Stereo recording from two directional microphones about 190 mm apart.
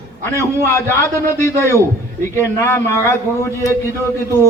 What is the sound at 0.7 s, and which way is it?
A man's voice, 15° left (ahead or behind).